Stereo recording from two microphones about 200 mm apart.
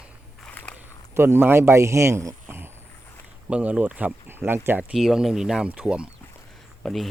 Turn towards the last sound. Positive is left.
turn(degrees=0)  # may be behind; listen again after turning